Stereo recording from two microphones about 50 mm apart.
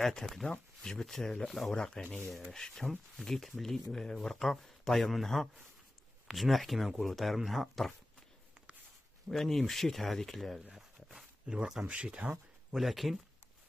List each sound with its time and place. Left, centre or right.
0.0 s speech: centre
9.3 s speech: centre
10.6 s a sound: centre
11.4 s speech: centre
12.7 s speech: centre